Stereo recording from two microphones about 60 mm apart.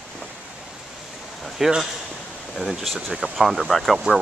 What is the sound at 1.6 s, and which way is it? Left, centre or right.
Speech, centre.